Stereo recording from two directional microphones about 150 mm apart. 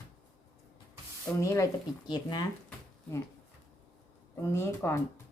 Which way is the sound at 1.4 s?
20° left (ahead or behind).